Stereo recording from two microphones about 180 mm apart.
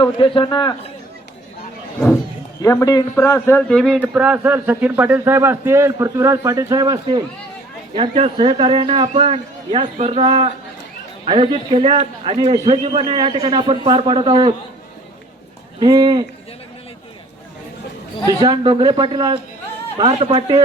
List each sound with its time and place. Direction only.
0.0 s a man's voice: 30° left (ahead or behind)
2.6 s a man's voice: 20° left (ahead or behind); by 14.5 s 25° right (ahead or behind)
15.8 s a man's voice: 20° right (ahead or behind)
18.3 s a man's voice: 20° right (ahead or behind)